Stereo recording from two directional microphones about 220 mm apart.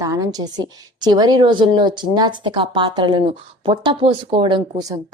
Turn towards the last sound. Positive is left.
turn(degrees=-20)  # may be behind; listen again after turning